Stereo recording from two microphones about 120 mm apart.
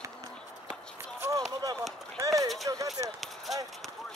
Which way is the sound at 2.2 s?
25° right (ahead or behind).